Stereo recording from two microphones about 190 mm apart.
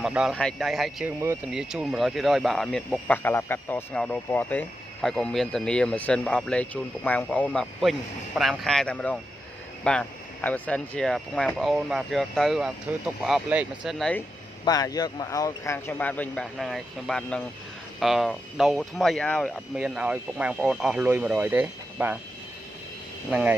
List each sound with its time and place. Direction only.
0.0 s speech: 5° right (ahead or behind)
1.2 s speech: 15° right (ahead or behind); by 14.2 s centre (ahead or behind)
14.6 s speech: 20° left (ahead or behind); by 22.2 s 5° right (ahead or behind)